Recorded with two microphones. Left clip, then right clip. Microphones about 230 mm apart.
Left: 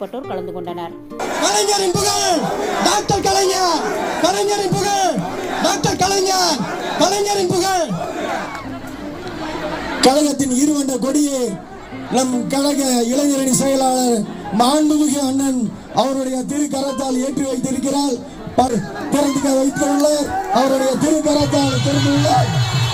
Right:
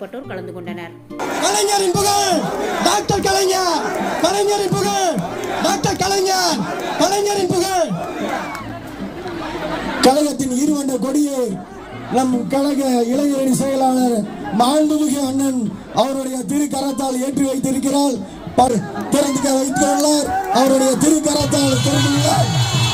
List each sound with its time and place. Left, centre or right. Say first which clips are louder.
1.4 s a man's voice: even; centre
10.0 s speech: even; left
14.6 s speech: even; left
16.0 s a man's voice: left 1 dB; centre; by 18.7 s right
19.1 s speech: even; right
20.6 s speech: right 1 dB; right